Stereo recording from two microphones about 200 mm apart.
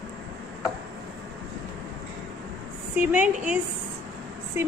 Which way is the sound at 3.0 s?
5° right (ahead or behind).